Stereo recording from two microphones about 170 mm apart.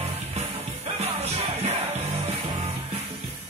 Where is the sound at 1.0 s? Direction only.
40° right (ahead or behind).